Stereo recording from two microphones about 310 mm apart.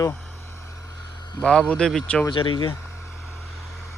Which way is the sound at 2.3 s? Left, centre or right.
Centre.